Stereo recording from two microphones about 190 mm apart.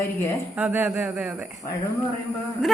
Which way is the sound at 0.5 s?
10° right (ahead or behind).